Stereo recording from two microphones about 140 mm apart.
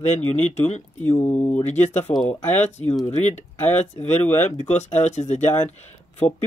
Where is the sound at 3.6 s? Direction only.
15° left (ahead or behind).